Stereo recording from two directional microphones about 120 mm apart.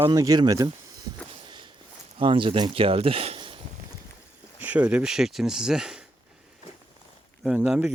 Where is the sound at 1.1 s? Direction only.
35° right (ahead or behind).